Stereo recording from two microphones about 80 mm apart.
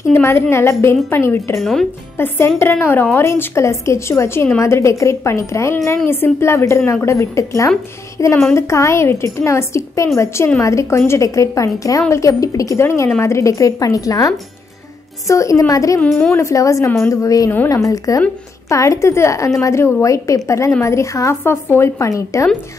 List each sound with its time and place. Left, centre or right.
0.1 s a woman's voice: left
1.6 s speech: centre
2.1 s a woman's voice: left
16.0 s a woman's voice: centre
16.3 s a woman's voice: left